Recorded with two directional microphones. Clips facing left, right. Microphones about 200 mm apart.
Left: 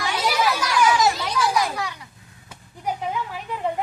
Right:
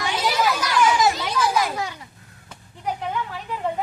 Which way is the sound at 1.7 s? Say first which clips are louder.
Right 1 dB; 25° right (ahead or behind).